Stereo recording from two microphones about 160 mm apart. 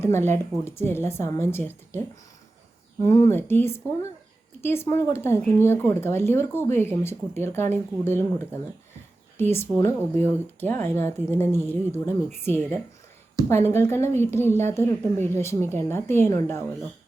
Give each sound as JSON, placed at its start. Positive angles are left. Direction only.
{"t": 0.0, "sound": "speech", "side_deg": 15}
{"t": 3.0, "sound": "speech", "side_deg": 15}
{"t": 9.4, "sound": "speech", "side_deg": 15}